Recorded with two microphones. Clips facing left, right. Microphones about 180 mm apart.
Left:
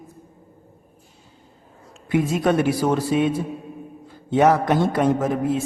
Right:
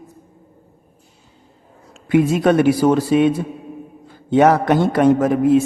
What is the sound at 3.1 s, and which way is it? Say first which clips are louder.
Speech: right 5 dB; 85° right.